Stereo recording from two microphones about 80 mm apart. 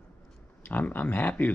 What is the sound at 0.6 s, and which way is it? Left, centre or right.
Speech, left.